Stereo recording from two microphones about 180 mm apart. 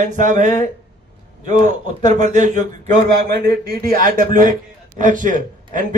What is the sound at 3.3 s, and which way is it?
A man's voice, 60° right (ahead or behind).